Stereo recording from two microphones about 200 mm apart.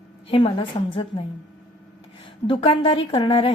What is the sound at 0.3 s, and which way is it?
Speech, 25° left (ahead or behind).